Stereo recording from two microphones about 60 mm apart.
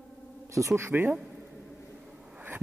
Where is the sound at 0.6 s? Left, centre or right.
Right.